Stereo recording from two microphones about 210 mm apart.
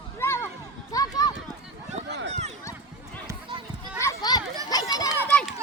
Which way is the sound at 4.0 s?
15° left (ahead or behind).